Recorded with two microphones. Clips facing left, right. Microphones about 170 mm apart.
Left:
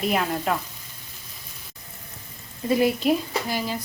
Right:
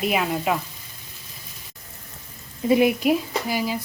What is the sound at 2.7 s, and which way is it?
Speech, 20° right (ahead or behind).